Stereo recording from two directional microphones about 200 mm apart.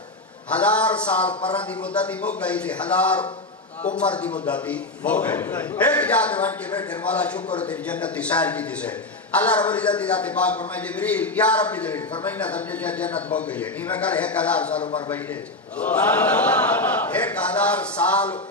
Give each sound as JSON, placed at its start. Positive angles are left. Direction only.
{"t": 0.5, "sound": "a man's voice", "side_deg": 5}
{"t": 15.8, "sound": "a man's voice", "side_deg": 5}